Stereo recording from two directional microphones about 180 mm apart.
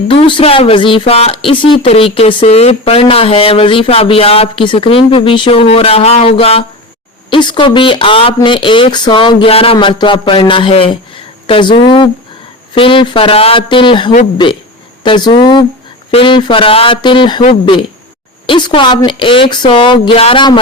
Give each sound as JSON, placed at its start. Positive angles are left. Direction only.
{"t": 0.1, "sound": "speech", "side_deg": 30}
{"t": 18.4, "sound": "speech", "side_deg": 25}